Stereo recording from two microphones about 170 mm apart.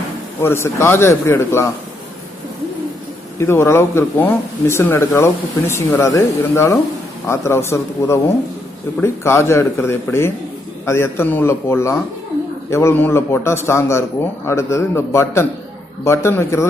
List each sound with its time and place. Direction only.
0.4 s speech: 15° left (ahead or behind)
3.3 s speech: 15° left (ahead or behind)